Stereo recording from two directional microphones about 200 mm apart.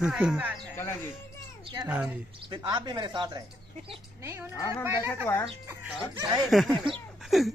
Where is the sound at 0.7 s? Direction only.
10° left (ahead or behind).